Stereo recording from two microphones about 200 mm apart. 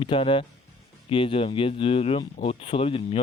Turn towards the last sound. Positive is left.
turn(degrees=25)  # may be behind; listen again after turning